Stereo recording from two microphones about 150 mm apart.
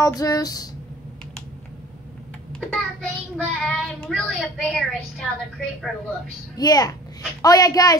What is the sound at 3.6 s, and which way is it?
Speech, 5° left (ahead or behind).